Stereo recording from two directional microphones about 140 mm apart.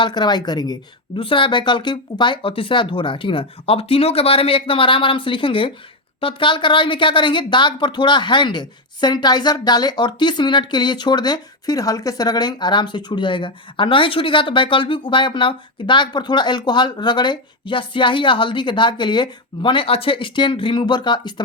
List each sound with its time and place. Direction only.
0.0 s speech: 30° left (ahead or behind)